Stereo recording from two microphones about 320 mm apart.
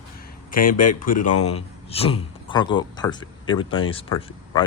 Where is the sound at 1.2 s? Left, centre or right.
Left.